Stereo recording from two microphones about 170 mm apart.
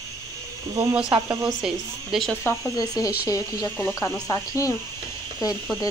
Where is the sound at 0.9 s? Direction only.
5° right (ahead or behind).